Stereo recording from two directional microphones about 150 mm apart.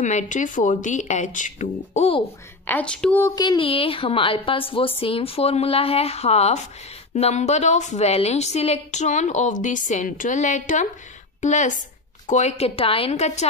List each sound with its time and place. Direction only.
0.0 s a woman's voice: 55° left (ahead or behind)
2.6 s a woman's voice: 10° left (ahead or behind)
3.3 s a woman's voice: 30° left (ahead or behind); by 13.5 s 45° left (ahead or behind)